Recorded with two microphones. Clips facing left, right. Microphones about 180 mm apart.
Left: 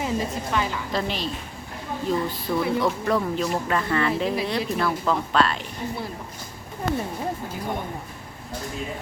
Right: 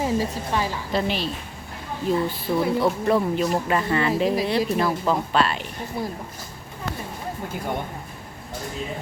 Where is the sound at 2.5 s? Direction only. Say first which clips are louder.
Right 2 dB; 25° right (ahead or behind).